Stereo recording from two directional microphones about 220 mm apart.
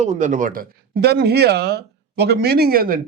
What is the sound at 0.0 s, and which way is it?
Speech, 35° right (ahead or behind).